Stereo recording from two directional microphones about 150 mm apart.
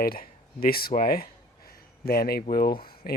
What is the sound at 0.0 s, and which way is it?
Speech, 80° left.